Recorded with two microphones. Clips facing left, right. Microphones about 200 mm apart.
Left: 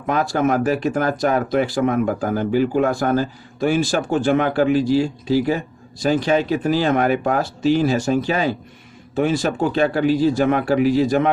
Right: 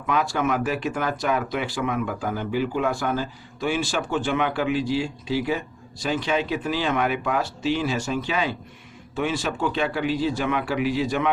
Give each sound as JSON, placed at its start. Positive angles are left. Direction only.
{"t": 0.0, "sound": "speech", "side_deg": 40}